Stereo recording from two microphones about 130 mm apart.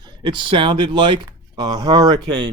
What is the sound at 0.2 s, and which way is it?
A man's voice, 40° right (ahead or behind).